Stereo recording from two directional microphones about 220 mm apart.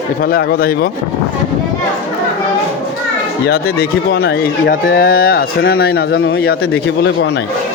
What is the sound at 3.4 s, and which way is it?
Speech, 45° left (ahead or behind).